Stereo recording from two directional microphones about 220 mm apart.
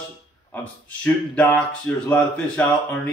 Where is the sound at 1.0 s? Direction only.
5° left (ahead or behind).